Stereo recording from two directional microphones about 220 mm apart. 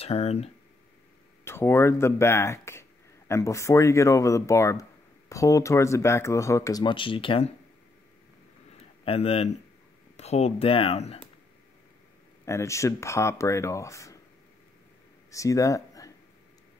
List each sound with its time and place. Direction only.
0.0 s speech: 30° left (ahead or behind)
1.4 s speech: 10° left (ahead or behind)
8.7 s a sound: 25° left (ahead or behind)
10.1 s speech: 30° left (ahead or behind)
12.4 s speech: 15° left (ahead or behind)
15.3 s speech: 15° left (ahead or behind)